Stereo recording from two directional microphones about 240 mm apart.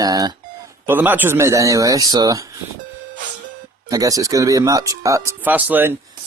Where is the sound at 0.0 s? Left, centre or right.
Centre.